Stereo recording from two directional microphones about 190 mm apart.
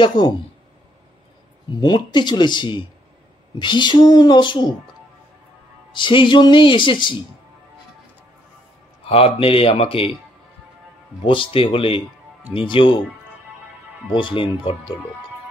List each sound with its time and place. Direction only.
0.0 s speech: 25° left (ahead or behind)
1.8 s speech: 25° left (ahead or behind)
5.9 s speech: 25° left (ahead or behind)
9.0 s speech: 30° left (ahead or behind)
11.2 s speech: 30° left (ahead or behind)
14.1 s speech: 25° left (ahead or behind)